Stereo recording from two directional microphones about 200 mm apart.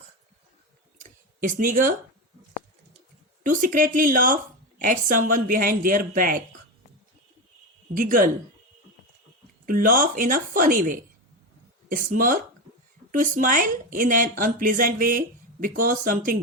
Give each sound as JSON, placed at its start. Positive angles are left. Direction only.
{"t": 0.9, "sound": "a sound", "side_deg": -45}
{"t": 3.4, "sound": "speech", "side_deg": -40}
{"t": 7.9, "sound": "speech", "side_deg": -45}
{"t": 9.6, "sound": "speech", "side_deg": -45}